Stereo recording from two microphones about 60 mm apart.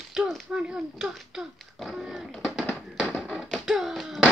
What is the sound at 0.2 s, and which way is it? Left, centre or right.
Speech, centre.